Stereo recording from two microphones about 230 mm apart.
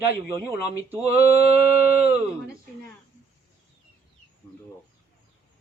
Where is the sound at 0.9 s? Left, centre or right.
Centre.